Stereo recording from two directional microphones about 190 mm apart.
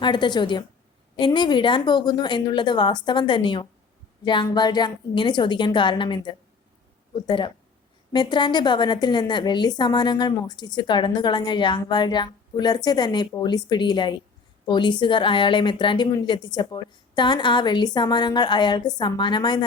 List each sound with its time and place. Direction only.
0.0 s a woman's voice: 25° left (ahead or behind)